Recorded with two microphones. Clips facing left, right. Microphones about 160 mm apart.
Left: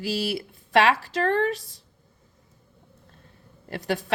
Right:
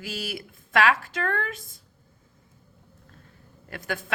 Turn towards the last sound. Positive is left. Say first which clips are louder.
# left 5 dB
turn(degrees=30)  # may be behind; listen again after turning